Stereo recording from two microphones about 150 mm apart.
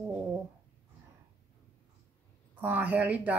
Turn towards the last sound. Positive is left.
turn(degrees=-10)  # may be behind; listen again after turning